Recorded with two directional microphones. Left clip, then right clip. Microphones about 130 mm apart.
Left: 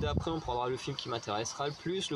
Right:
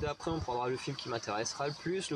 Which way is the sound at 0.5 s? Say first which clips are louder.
Even; 15° left (ahead or behind).